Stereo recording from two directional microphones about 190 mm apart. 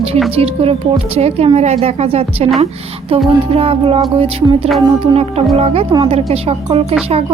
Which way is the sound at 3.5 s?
30° right (ahead or behind).